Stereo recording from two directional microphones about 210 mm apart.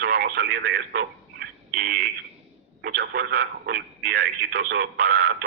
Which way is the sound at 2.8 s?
50° right (ahead or behind).